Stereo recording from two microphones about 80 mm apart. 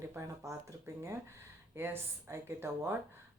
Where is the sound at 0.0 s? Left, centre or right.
Right.